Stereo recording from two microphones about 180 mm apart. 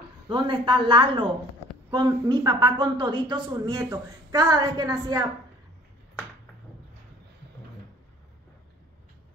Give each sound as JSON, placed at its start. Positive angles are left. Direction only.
{"t": 0.3, "sound": "a woman's voice", "side_deg": -25}